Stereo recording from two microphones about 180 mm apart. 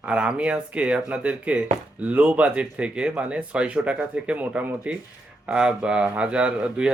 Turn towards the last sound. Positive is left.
turn(degrees=-5)  # may be behind; listen again after turning